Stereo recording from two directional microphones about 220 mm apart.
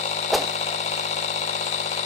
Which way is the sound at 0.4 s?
30° left (ahead or behind).